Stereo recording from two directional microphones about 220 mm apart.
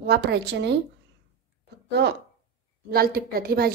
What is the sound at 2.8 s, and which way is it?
Speech, 45° right (ahead or behind).